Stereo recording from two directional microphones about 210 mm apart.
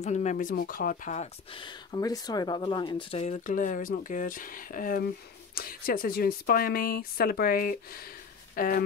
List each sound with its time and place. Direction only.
0.0 s speech: 35° left (ahead or behind)